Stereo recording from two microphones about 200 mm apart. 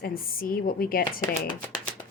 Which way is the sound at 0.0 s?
45° left (ahead or behind).